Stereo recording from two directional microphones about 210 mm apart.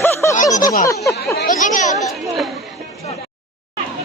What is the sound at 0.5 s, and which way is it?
Speech, 40° left (ahead or behind).